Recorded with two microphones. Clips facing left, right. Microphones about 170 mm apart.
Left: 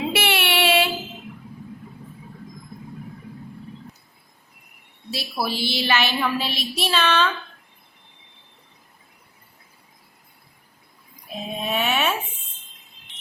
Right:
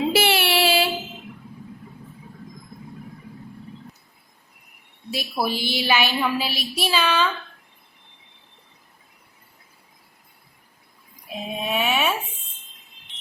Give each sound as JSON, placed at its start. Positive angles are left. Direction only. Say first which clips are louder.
{"t": 0.1, "sound": "child singing", "louder": "right 3 dB", "side_deg": -30}
{"t": 5.1, "sound": "a woman's voice", "louder": "right 2 dB", "side_deg": -15}
{"t": 11.5, "sound": "a sound", "louder": "even", "side_deg": -5}